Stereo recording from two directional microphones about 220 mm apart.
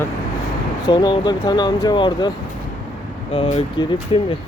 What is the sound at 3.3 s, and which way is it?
Speech, 25° left (ahead or behind).